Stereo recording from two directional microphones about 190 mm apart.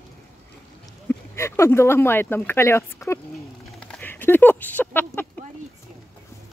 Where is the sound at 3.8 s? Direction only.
5° left (ahead or behind).